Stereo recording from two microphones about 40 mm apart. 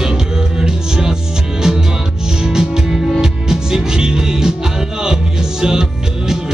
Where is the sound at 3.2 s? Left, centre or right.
Centre.